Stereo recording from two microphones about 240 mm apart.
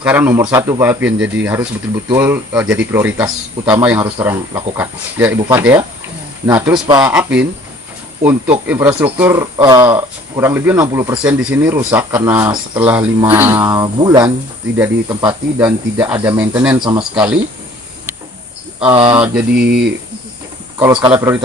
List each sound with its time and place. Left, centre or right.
0.0 s speech: centre
7.1 s speech: centre
18.9 s speech: right
19.1 s speech: centre
19.5 s speech: right
20.7 s speech: centre